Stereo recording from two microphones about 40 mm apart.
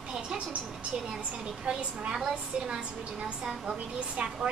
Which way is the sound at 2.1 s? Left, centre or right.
Centre.